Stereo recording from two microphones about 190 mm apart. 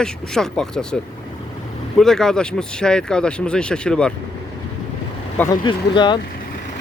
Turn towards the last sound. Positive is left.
turn(degrees=25)  # may be behind; listen again after turning